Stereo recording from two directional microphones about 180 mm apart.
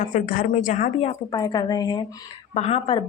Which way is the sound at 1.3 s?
20° left (ahead or behind).